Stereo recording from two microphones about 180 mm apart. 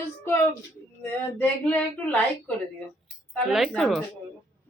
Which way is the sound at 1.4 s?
5° left (ahead or behind).